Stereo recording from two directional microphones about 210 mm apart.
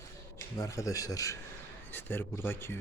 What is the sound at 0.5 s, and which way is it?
A man's voice, 15° left (ahead or behind).